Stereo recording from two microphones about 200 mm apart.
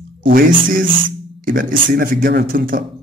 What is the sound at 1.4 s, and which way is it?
Speech, 45° right (ahead or behind).